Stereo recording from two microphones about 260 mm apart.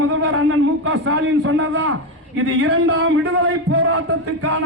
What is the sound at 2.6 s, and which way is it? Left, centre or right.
Speech, right.